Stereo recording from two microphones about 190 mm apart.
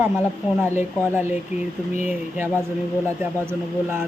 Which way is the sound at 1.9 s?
40° left (ahead or behind).